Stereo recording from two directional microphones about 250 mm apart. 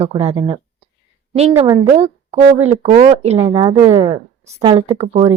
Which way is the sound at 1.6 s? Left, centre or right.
Right.